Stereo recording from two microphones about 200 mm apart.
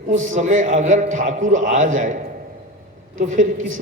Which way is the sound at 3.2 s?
40° right (ahead or behind).